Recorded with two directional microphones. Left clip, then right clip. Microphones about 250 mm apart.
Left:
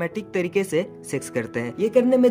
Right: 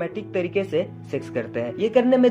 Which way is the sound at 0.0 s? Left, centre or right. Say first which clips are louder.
Even; left.